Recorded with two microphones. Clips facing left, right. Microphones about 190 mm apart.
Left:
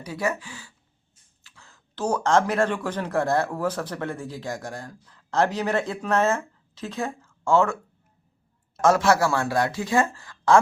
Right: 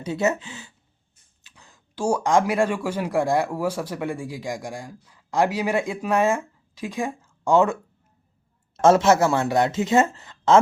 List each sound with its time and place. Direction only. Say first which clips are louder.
0.0 s speech: right 4 dB; 25° right (ahead or behind)
8.8 s speech: right 3 dB; 25° right (ahead or behind)